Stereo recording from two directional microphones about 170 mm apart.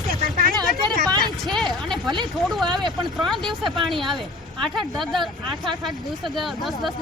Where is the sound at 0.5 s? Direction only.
25° right (ahead or behind).